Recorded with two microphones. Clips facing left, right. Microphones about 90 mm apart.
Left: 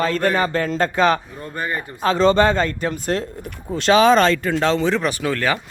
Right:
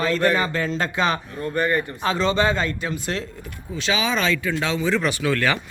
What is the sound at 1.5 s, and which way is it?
Speech, 15° left (ahead or behind).